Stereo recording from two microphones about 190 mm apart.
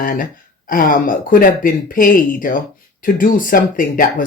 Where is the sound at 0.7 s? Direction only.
45° left (ahead or behind).